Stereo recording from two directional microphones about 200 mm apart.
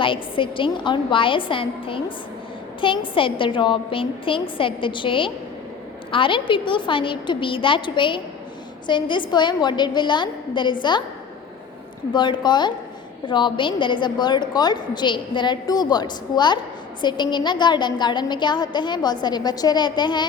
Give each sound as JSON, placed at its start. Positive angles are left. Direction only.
{"t": 0.0, "sound": "a woman's voice", "side_deg": 25}
{"t": 12.1, "sound": "a woman's voice", "side_deg": 25}